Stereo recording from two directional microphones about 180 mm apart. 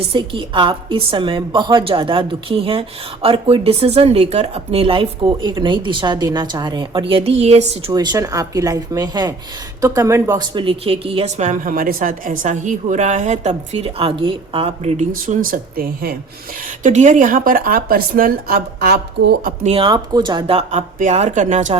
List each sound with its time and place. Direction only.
0.1 s a woman's voice: 30° right (ahead or behind)
7.9 s a woman's voice: 20° right (ahead or behind)
15.1 s speech: 50° right (ahead or behind)
16.8 s speech: 40° right (ahead or behind); by 19.5 s 60° right (ahead or behind)
19.6 s speech: 30° right (ahead or behind)